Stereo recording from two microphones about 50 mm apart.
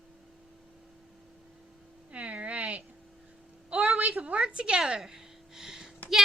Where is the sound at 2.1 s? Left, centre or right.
Right; by 5.9 s centre.